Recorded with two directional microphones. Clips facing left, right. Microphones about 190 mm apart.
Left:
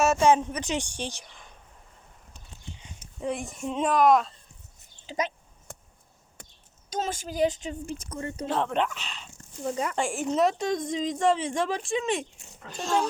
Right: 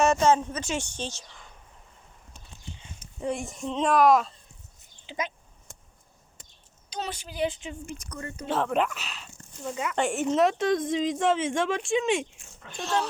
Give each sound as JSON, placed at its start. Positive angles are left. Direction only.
{"t": 0.0, "sound": "a woman's voice", "side_deg": 10}
{"t": 3.2, "sound": "a woman's voice", "side_deg": 0}
{"t": 5.0, "sound": "speech", "side_deg": 40}
{"t": 6.9, "sound": "a woman's voice", "side_deg": 45}
{"t": 8.4, "sound": "a woman's voice", "side_deg": 0}
{"t": 9.6, "sound": "a woman's voice", "side_deg": 35}
{"t": 10.0, "sound": "a woman's voice", "side_deg": 0}
{"t": 12.6, "sound": "a woman's voice", "side_deg": 40}